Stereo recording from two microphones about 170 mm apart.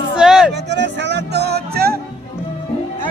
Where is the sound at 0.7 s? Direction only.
90° right; by 1.9 s 70° right (ahead or behind).